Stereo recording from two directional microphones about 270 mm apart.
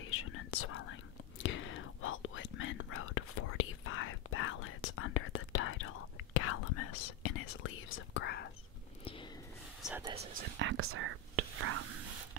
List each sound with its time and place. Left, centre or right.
0.0 s whispering: left
9.0 s a sound: centre
9.8 s whispering: centre
10.3 s whispering: right